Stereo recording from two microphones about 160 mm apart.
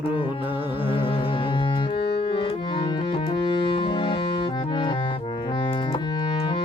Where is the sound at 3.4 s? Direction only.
30° left (ahead or behind).